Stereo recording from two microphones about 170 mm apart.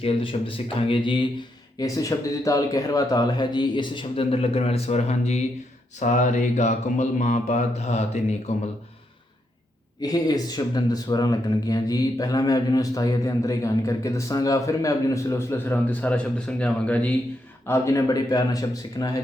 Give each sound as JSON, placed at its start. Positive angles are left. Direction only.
{"t": 0.0, "sound": "speech", "side_deg": 30}
{"t": 1.8, "sound": "speech", "side_deg": 20}
{"t": 6.0, "sound": "mantra", "side_deg": 45}
{"t": 10.0, "sound": "speech", "side_deg": 20}
{"t": 17.7, "sound": "speech", "side_deg": 15}